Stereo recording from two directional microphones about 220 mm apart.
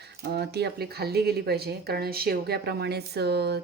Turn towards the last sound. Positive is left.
turn(degrees=-50)  # may be behind; listen again after turning